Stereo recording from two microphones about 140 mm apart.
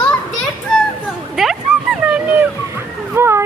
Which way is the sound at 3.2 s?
20° right (ahead or behind).